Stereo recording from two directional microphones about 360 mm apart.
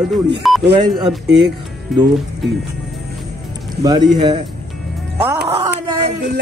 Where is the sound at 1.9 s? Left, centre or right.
Centre.